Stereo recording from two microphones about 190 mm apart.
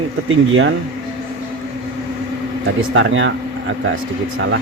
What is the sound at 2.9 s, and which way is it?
Speech, 85° right.